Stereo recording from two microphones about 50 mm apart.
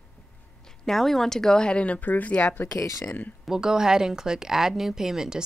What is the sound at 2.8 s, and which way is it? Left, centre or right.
Speech, left.